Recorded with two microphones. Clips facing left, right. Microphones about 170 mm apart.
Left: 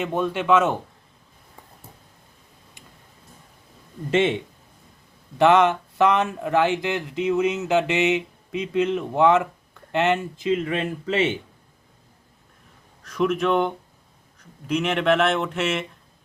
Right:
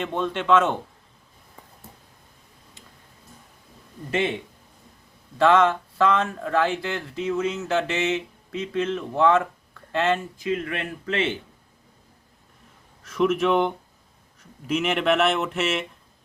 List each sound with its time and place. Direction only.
0.0 s speech: 10° left (ahead or behind)
4.1 s speech: 25° left (ahead or behind)
5.4 s speech: 20° left (ahead or behind)
13.0 s speech: centre (ahead or behind)